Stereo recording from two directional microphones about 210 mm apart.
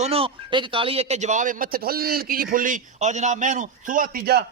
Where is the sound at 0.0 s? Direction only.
25° right (ahead or behind).